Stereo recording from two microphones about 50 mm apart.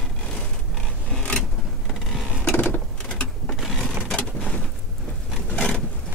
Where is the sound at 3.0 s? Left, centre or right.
Centre.